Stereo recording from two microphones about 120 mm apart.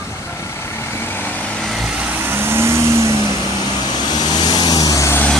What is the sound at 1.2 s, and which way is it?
Vehicle, 15° left (ahead or behind).